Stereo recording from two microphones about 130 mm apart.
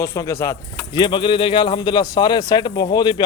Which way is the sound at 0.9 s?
35° left (ahead or behind).